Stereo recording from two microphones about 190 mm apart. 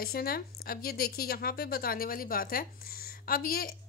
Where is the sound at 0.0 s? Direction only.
50° left (ahead or behind).